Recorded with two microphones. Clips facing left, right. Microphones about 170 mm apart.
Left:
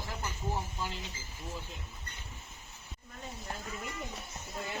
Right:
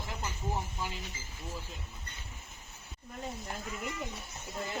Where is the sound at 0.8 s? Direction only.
15° right (ahead or behind).